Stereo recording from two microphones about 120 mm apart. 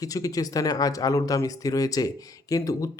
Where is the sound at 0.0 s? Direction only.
30° left (ahead or behind).